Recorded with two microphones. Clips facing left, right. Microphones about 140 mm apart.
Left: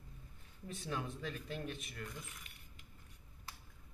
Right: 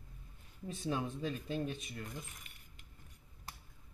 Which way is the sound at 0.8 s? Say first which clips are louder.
Right 5 dB; 20° right (ahead or behind).